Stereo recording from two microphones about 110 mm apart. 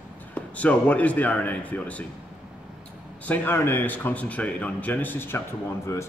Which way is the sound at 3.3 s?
20° left (ahead or behind).